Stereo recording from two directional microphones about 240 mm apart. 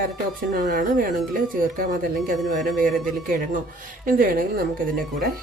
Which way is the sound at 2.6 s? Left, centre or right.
Centre.